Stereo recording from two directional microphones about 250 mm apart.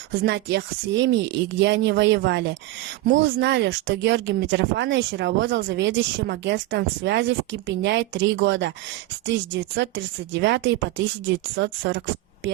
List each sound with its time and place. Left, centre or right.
0.2 s speech: right